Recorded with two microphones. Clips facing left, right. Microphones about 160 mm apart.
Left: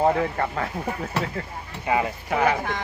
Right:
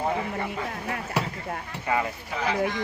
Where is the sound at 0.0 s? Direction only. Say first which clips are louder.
Left 6 dB; 85° left.